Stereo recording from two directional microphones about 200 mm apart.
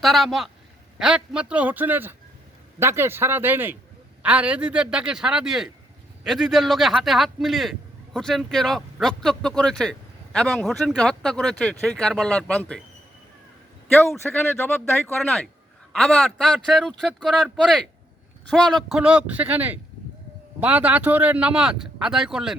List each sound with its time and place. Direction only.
0.0 s speech: centre (ahead or behind)
13.9 s speech: centre (ahead or behind)